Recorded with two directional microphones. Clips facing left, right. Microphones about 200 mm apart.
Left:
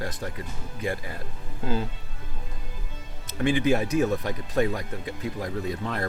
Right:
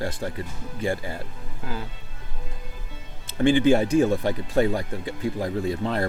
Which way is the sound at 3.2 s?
30° right (ahead or behind).